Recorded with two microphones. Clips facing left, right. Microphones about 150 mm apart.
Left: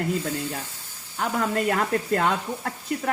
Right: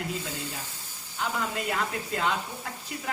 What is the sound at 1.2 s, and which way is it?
Speech, 50° left (ahead or behind).